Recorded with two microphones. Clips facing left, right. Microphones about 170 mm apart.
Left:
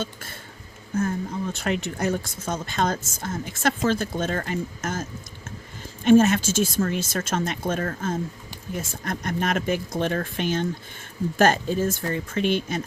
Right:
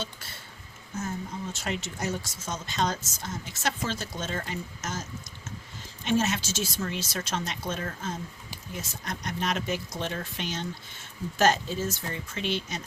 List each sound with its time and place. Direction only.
0.0 s speech: 50° left (ahead or behind)
1.5 s speech: 60° left (ahead or behind)
6.1 s speech: 50° left (ahead or behind)